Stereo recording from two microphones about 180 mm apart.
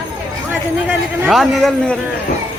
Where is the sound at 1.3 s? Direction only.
Centre (ahead or behind).